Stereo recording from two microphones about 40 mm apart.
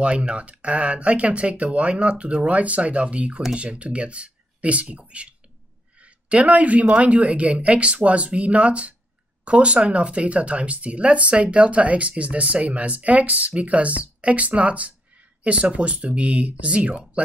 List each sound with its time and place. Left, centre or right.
0.0 s speech: right